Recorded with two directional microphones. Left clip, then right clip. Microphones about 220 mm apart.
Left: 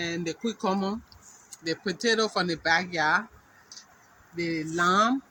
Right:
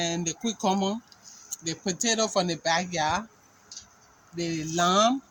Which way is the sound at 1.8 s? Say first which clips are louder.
Right 1 dB; 45° right (ahead or behind).